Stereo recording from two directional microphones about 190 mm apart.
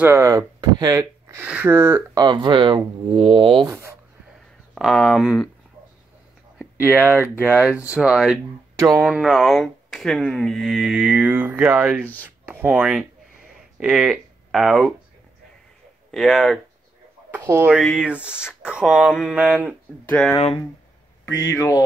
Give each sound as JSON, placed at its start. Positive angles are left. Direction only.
{"t": 0.0, "sound": "speech", "side_deg": -15}
{"t": 2.2, "sound": "speech", "side_deg": -25}
{"t": 3.6, "sound": "speech", "side_deg": -15}
{"t": 4.7, "sound": "speech", "side_deg": 0}
{"t": 6.6, "sound": "speech", "side_deg": -10}
{"t": 8.7, "sound": "speech", "side_deg": -20}
{"t": 9.0, "sound": "speech", "side_deg": -5}
{"t": 16.1, "sound": "speech", "side_deg": 0}
{"t": 17.3, "sound": "speech", "side_deg": -10}
{"t": 17.7, "sound": "speech", "side_deg": 0}
{"t": 20.1, "sound": "speech", "side_deg": 10}
{"t": 20.3, "sound": "speech", "side_deg": 30}
{"t": 21.3, "sound": "speech", "side_deg": 15}